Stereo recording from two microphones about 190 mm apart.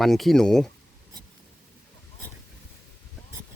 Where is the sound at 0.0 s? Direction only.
Centre (ahead or behind).